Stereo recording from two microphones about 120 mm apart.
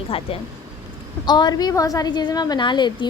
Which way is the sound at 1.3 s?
35° left (ahead or behind).